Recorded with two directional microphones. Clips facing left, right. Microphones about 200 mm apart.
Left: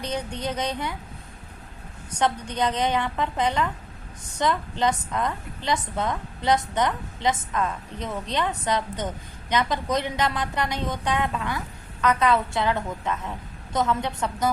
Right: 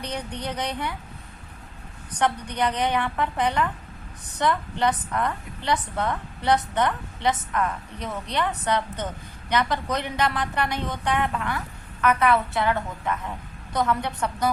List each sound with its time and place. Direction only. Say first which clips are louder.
0.4 s a woman's voice: even; 20° left (ahead or behind)
2.6 s a woman's voice: even; 20° left (ahead or behind)